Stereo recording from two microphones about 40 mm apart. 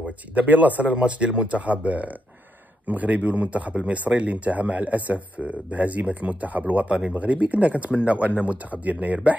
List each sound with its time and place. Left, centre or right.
0.0 s speech: right
0.9 s speech: right